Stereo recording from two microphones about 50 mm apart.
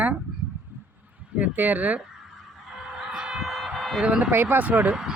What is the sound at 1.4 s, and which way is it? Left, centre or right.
Speech, right.